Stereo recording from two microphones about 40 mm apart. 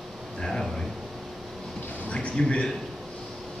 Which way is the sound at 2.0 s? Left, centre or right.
Left.